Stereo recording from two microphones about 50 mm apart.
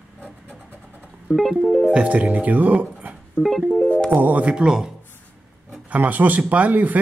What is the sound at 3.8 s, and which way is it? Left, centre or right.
Speech, left.